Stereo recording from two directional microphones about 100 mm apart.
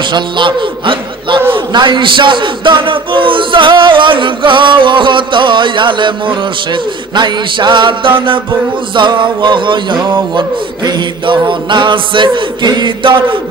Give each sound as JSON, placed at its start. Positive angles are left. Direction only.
{"t": 0.1, "sound": "a sound", "side_deg": -55}
{"t": 1.5, "sound": "a man's voice", "side_deg": -50}
{"t": 8.9, "sound": "music", "side_deg": -50}